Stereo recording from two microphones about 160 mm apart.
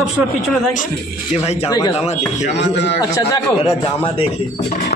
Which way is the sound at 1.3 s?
40° left (ahead or behind).